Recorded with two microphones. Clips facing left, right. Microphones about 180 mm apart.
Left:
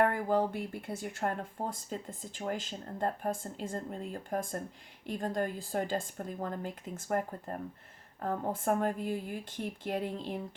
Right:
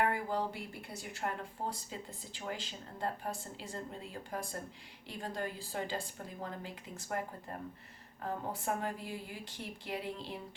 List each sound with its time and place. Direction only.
0.0 s speech: 50° left (ahead or behind)
8.2 s speech: 50° left (ahead or behind)